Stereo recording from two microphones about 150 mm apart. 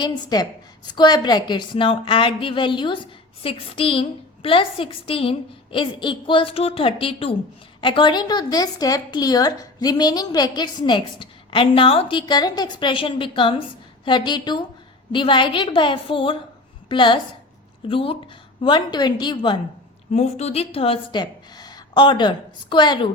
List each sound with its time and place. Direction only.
0.0 s a woman's voice: 30° left (ahead or behind)
20.1 s a woman's voice: 45° left (ahead or behind)